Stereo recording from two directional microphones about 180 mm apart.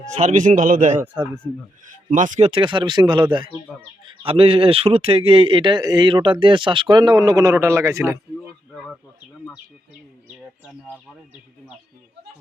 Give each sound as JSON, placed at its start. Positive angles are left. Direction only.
{"t": 0.1, "sound": "a man's voice", "side_deg": -40}
{"t": 2.0, "sound": "a man's voice", "side_deg": -45}
{"t": 2.5, "sound": "speech", "side_deg": -25}
{"t": 3.7, "sound": "speech", "side_deg": 5}
{"t": 4.3, "sound": "speech", "side_deg": -30}